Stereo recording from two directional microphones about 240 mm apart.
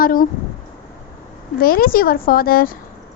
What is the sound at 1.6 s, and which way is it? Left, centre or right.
A woman's voice, left.